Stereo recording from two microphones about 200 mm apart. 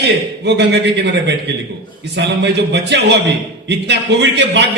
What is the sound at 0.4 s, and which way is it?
Speech, 60° right (ahead or behind).